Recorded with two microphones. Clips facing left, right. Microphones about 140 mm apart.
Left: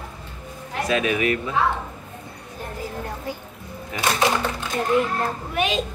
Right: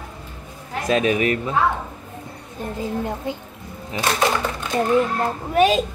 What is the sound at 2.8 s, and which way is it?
Speech, 20° right (ahead or behind).